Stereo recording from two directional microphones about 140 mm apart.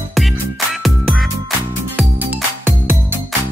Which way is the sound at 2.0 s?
10° right (ahead or behind).